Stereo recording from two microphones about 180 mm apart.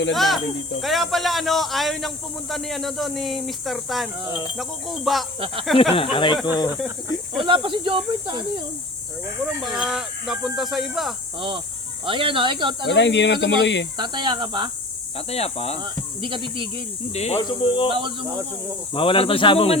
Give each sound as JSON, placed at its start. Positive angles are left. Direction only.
{"t": 0.1, "sound": "a man's voice", "side_deg": 0}
{"t": 5.9, "sound": "speech", "side_deg": 30}
{"t": 7.3, "sound": "speech", "side_deg": -30}
{"t": 9.6, "sound": "a man's voice", "side_deg": -5}
{"t": 11.3, "sound": "speech", "side_deg": -30}
{"t": 12.9, "sound": "speech", "side_deg": 75}
{"t": 13.9, "sound": "speech", "side_deg": -25}
{"t": 15.3, "sound": "speech", "side_deg": 35}
{"t": 15.8, "sound": "speech", "side_deg": -25}
{"t": 17.2, "sound": "speech", "side_deg": 35}
{"t": 17.4, "sound": "speech", "side_deg": 25}
{"t": 17.9, "sound": "speech", "side_deg": -25}
{"t": 18.9, "sound": "speech", "side_deg": 30}